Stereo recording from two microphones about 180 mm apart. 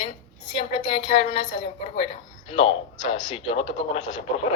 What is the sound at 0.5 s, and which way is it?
A woman's voice, 40° left (ahead or behind).